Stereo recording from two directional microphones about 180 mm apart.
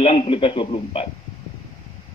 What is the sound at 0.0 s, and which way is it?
Speech, 30° left (ahead or behind).